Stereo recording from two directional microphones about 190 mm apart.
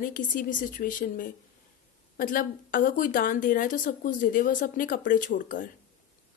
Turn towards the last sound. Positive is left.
turn(degrees=45)  # may be behind; listen again after turning